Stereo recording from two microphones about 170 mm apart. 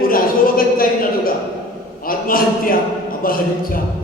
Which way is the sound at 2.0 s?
55° left (ahead or behind).